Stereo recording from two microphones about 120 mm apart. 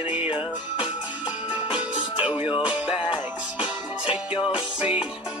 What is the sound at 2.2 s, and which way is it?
Music, 10° right (ahead or behind).